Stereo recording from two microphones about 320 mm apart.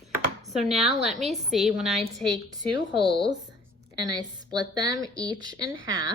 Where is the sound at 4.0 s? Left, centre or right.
Centre.